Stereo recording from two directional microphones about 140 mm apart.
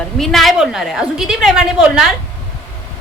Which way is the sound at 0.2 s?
Centre (ahead or behind).